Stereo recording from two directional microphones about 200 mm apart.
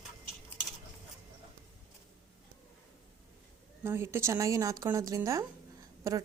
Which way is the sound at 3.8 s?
10° right (ahead or behind).